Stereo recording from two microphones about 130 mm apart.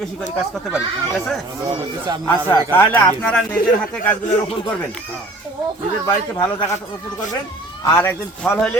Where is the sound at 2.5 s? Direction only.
15° left (ahead or behind).